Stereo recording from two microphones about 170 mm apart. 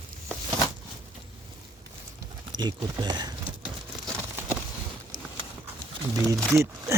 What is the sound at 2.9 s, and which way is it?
Speech, 25° right (ahead or behind).